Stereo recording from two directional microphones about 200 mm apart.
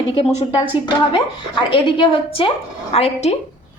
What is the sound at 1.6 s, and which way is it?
A woman's voice, 25° left (ahead or behind).